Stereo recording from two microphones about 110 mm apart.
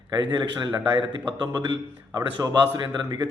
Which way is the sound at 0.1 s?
40° right (ahead or behind).